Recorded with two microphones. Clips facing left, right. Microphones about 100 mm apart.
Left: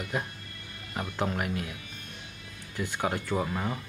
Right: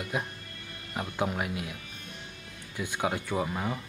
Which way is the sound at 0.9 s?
10° right (ahead or behind).